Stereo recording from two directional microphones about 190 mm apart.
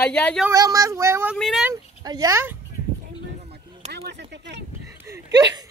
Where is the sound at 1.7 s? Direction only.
20° right (ahead or behind).